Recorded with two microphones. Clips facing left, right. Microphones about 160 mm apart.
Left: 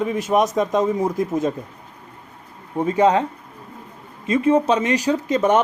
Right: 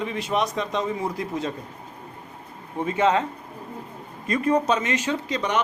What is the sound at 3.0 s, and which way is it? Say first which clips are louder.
Speech: left 4 dB; 35° left (ahead or behind).